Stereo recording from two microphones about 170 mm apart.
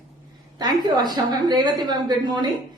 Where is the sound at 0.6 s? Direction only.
25° right (ahead or behind).